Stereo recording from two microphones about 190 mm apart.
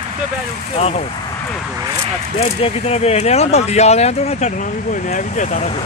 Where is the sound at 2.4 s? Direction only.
35° left (ahead or behind).